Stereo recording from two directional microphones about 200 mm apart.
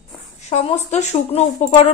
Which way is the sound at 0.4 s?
35° left (ahead or behind).